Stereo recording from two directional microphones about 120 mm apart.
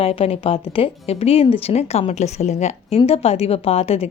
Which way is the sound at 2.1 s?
70° left (ahead or behind).